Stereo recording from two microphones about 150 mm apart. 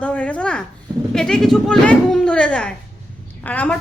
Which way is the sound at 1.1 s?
5° left (ahead or behind).